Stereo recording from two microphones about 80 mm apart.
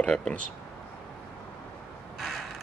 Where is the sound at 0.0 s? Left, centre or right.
Centre.